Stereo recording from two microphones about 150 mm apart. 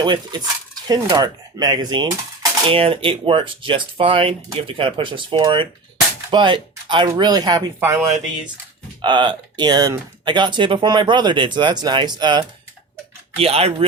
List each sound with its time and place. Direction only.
0.0 s speech: 30° right (ahead or behind)
9.0 s speech: 30° right (ahead or behind)
13.3 s speech: 40° right (ahead or behind)